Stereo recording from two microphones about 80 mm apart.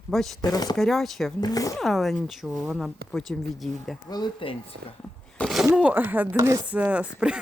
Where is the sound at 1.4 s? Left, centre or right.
Left.